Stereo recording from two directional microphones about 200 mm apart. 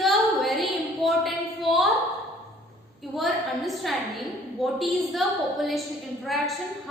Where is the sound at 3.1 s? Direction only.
Centre (ahead or behind).